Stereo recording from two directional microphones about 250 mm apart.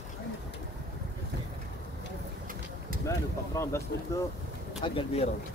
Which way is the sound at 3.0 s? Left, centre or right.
Centre.